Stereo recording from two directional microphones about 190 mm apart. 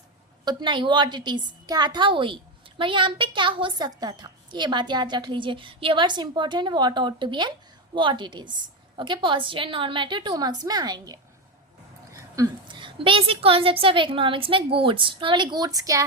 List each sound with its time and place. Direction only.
0.4 s a woman's voice: 25° right (ahead or behind)